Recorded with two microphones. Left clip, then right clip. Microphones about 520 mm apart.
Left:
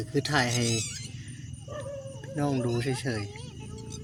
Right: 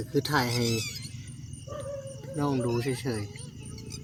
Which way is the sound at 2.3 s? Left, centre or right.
Right.